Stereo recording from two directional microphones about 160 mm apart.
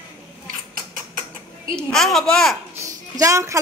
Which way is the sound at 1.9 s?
Centre (ahead or behind).